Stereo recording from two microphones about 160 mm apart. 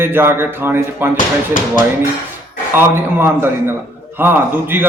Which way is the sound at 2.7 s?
15° right (ahead or behind).